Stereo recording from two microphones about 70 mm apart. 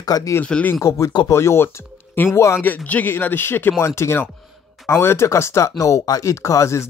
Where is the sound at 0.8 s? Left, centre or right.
Left.